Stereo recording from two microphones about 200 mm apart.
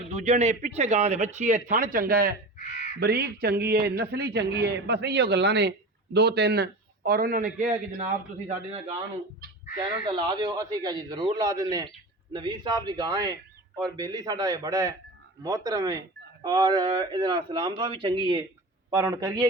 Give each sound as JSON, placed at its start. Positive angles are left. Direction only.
{"t": 0.1, "sound": "speech", "side_deg": -35}
{"t": 2.6, "sound": "crow", "side_deg": 40}
{"t": 3.0, "sound": "a man's voice", "side_deg": -50}
{"t": 9.7, "sound": "a man's voice", "side_deg": -20}